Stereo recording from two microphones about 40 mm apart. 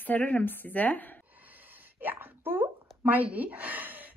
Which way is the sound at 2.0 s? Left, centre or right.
Right.